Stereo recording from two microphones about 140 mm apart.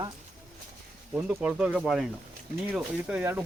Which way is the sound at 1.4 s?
5° right (ahead or behind).